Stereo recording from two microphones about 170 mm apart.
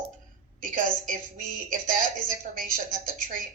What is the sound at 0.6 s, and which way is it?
A woman's voice, 50° right (ahead or behind).